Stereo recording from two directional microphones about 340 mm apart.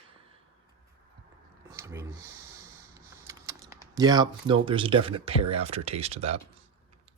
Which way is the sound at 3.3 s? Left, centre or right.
Centre.